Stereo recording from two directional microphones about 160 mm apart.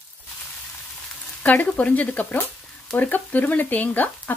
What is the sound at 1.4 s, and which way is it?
Speech, 10° left (ahead or behind).